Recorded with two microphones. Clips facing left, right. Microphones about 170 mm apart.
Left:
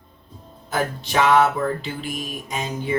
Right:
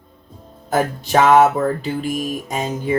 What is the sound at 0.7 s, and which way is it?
Music, 45° right (ahead or behind).